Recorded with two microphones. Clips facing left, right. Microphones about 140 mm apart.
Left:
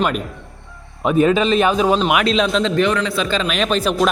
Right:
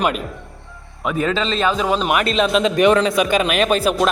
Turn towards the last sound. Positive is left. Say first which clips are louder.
# right 1 dB
turn(degrees=-5)  # may be behind; listen again after turning